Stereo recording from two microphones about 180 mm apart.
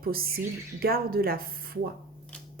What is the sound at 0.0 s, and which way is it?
Speech, 55° right (ahead or behind).